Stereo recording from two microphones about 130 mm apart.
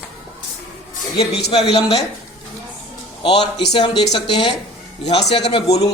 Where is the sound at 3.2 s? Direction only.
40° left (ahead or behind).